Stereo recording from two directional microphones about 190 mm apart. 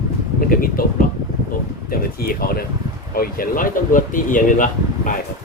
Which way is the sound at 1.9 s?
50° left (ahead or behind).